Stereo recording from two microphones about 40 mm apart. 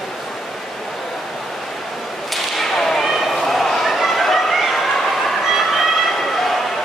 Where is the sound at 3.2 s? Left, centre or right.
Centre.